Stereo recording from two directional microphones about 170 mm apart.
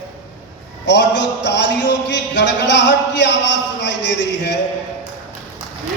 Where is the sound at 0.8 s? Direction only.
90° left.